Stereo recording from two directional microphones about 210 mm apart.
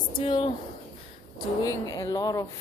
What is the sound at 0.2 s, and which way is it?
Speech, 25° left (ahead or behind).